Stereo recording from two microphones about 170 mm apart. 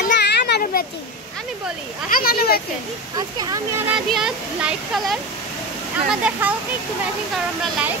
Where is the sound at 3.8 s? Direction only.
5° right (ahead or behind).